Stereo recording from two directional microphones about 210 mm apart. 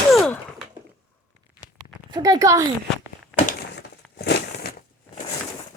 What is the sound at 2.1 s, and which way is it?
Speech, 15° right (ahead or behind).